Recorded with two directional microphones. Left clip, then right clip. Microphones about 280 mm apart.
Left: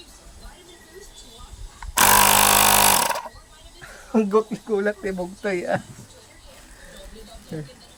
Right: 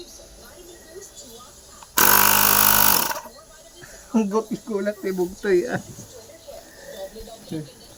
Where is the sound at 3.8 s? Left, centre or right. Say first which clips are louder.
Left 2 dB; left.